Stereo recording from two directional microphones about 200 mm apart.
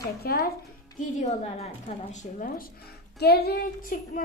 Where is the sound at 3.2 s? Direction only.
50° left (ahead or behind).